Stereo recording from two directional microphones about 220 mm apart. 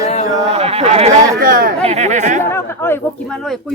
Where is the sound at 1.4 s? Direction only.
40° right (ahead or behind).